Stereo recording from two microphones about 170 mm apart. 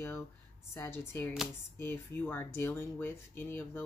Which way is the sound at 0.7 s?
15° left (ahead or behind).